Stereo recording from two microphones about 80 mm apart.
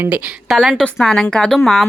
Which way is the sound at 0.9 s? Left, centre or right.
Centre.